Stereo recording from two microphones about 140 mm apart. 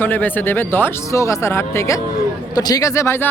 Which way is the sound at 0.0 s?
15° left (ahead or behind).